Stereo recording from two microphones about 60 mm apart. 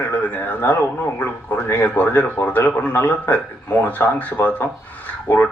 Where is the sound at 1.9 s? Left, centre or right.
Left.